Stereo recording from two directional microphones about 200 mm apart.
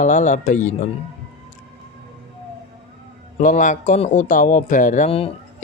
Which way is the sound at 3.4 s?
40° left (ahead or behind).